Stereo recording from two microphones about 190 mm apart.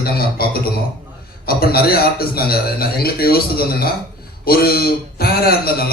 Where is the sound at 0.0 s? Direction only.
55° left (ahead or behind).